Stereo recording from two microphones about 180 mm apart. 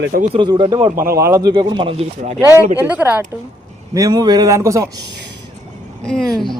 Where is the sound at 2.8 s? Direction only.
10° right (ahead or behind).